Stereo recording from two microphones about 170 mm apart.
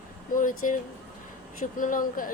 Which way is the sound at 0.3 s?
50° left (ahead or behind).